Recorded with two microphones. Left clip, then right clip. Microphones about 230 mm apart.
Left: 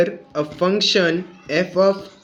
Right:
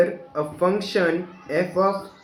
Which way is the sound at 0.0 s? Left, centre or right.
Left.